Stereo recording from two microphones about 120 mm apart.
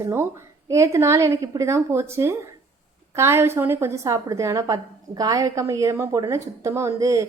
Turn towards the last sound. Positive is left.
turn(degrees=-25)  # may be behind; listen again after turning